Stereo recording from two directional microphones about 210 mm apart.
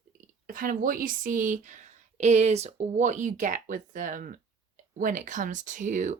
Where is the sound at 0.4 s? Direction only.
40° right (ahead or behind).